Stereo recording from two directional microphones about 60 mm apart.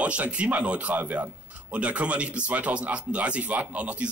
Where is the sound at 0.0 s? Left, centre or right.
Right.